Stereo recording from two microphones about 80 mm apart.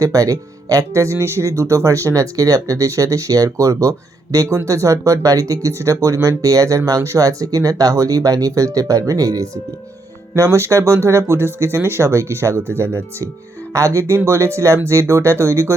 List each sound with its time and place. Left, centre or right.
0.0 s speech: right
10.3 s speech: right